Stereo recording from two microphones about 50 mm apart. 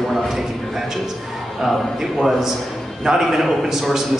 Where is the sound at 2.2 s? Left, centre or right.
Centre.